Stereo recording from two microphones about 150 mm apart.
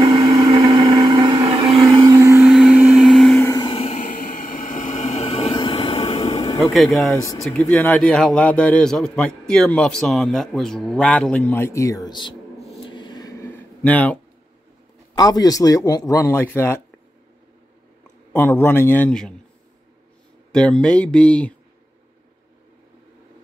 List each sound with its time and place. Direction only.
0.6 s blender: 30° right (ahead or behind)
1.8 s vehicle: 25° right (ahead or behind)
2.4 s vehicle: 5° right (ahead or behind)
3.6 s music: 40° left (ahead or behind)
4.0 s a sound: 65° left (ahead or behind); by 6.6 s 40° left (ahead or behind)
6.7 s speech: centre (ahead or behind); by 12.4 s 30° left (ahead or behind)
12.5 s a sound: 35° left (ahead or behind); by 14.2 s 10° left (ahead or behind)
15.1 s speech: 25° left (ahead or behind)
18.3 s a man's voice: 15° left (ahead or behind)
20.5 s a man's voice: 5° left (ahead or behind)